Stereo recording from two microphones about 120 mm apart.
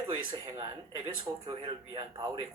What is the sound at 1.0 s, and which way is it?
Speech, 45° right (ahead or behind).